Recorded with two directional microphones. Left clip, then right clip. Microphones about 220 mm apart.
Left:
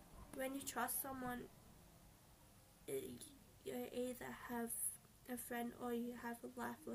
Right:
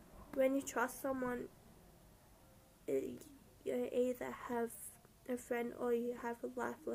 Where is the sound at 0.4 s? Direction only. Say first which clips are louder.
Right 10 dB; 20° left (ahead or behind).